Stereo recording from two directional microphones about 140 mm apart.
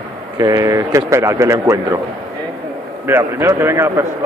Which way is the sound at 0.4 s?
25° right (ahead or behind).